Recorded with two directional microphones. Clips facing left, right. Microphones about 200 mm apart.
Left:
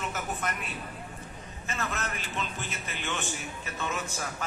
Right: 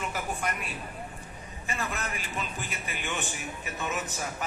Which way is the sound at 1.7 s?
15° right (ahead or behind).